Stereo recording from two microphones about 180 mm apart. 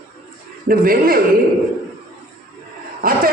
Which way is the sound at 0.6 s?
55° right (ahead or behind).